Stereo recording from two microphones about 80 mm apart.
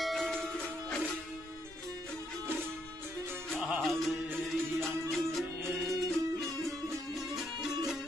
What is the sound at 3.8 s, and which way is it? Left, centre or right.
Music, centre.